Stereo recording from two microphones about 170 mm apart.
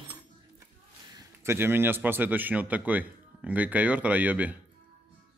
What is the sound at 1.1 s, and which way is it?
Speech, 15° right (ahead or behind).